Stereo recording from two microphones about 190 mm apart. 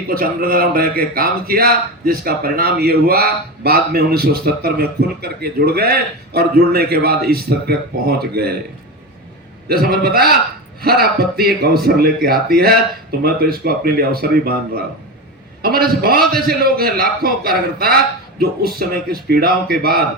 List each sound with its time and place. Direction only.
0.1 s a man's voice: 50° right (ahead or behind)
9.6 s speech: 55° right (ahead or behind)